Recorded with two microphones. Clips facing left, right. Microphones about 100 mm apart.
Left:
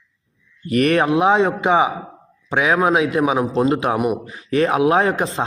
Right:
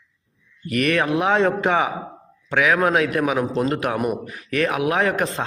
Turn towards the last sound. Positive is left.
turn(degrees=20)  # may be behind; listen again after turning